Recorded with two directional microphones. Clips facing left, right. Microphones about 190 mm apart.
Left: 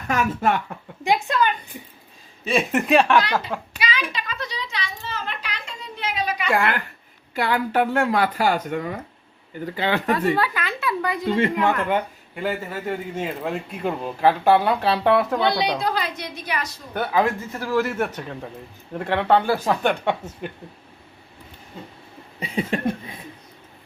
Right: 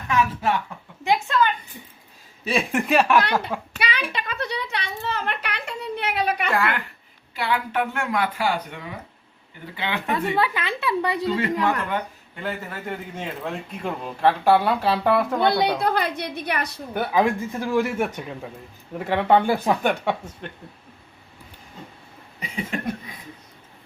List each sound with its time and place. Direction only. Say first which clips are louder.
0.1 s speech: left 1 dB; 45° left (ahead or behind)
1.0 s a woman's voice: even; 15° left (ahead or behind)
2.4 s speech: left 2 dB; centre (ahead or behind)
3.8 s a sound: left 1 dB; 60° right (ahead or behind)
7.3 s speech: left 3 dB; 45° left (ahead or behind)
10.1 s speech: right 1 dB; 20° right (ahead or behind)
11.3 s speech: left 5 dB; 25° left (ahead or behind)
13.1 s speech: left 4 dB; 5° left (ahead or behind)
15.8 s a woman's voice: right 2 dB; 55° right (ahead or behind)
16.9 s a man's voice: even; 10° right (ahead or behind)
20.4 s a woman's voice: left 7 dB; 10° left (ahead or behind)
22.4 s a sound: left 5 dB; 30° left (ahead or behind)